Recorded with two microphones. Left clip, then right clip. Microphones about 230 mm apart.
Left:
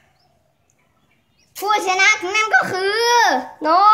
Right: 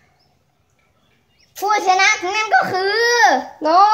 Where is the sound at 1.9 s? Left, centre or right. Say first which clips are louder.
Right 1 dB; centre.